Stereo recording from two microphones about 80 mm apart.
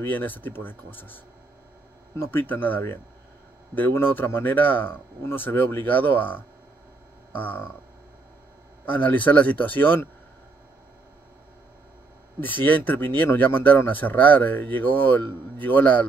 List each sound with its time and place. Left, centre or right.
0.0 s speech: left
2.3 s speech: left
8.8 s speech: left
12.6 s speech: left